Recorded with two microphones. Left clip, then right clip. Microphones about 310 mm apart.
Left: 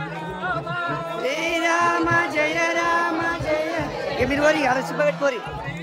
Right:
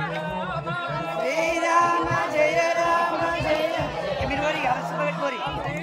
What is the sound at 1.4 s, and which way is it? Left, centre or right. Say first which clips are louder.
Music: even; centre.